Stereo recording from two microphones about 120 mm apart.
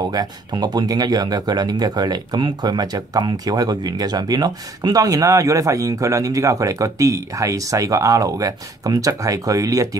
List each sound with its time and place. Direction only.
0.1 s speech: 35° right (ahead or behind)